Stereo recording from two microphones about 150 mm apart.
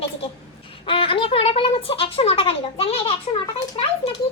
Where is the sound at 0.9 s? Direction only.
35° left (ahead or behind).